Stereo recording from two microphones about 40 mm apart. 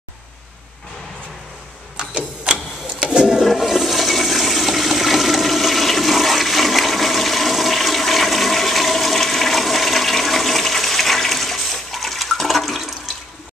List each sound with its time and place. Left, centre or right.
2.0 s printer: right
3.0 s toilet flush: centre